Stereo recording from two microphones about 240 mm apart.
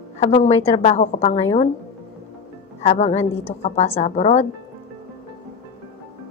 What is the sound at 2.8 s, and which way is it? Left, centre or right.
A woman's voice, left.